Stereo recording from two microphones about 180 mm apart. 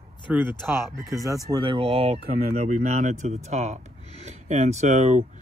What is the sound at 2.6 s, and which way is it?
Speech, 45° right (ahead or behind).